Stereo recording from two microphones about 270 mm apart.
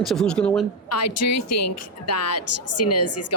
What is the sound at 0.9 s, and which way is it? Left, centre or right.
A woman's voice, left.